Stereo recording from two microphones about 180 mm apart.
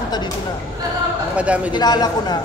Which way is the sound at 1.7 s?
25° left (ahead or behind).